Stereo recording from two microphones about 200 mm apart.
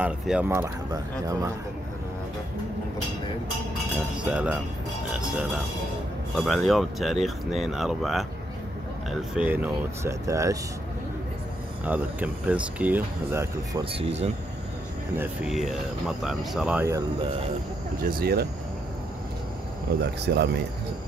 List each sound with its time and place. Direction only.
0.0 s speech: 5° right (ahead or behind)
4.2 s speech: 5° right (ahead or behind)
6.3 s speech: centre (ahead or behind)
10.0 s speech: 15° right (ahead or behind)
11.8 s speech: 10° right (ahead or behind)
13.9 s speech: 30° right (ahead or behind)
15.1 s speech: centre (ahead or behind)
18.0 s speech: 50° right (ahead or behind)
20.0 s speech: 55° right (ahead or behind)